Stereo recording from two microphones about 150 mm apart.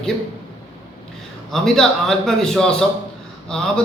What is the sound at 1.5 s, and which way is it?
A man's voice, centre (ahead or behind).